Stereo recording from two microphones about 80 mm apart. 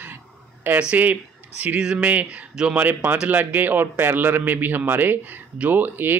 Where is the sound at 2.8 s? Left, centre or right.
Right.